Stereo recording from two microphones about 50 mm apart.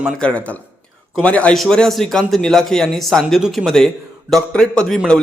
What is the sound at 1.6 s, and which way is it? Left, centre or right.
Speech, centre.